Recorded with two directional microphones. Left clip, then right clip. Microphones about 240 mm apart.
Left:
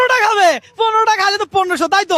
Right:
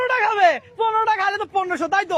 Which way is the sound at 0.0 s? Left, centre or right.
Left.